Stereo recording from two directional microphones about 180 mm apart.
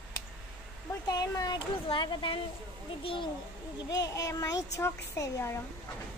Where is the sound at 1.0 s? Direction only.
20° left (ahead or behind).